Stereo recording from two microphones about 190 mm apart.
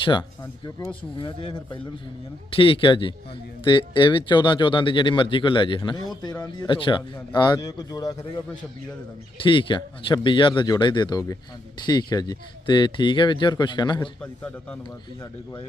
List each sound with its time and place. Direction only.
0.0 s speech: 25° left (ahead or behind)
9.4 s speech: 25° left (ahead or behind)
14.2 s a man's voice: 5° left (ahead or behind)
14.8 s speech: 25° left (ahead or behind)